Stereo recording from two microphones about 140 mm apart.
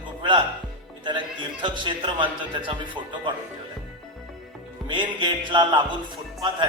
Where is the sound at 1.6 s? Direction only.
35° right (ahead or behind).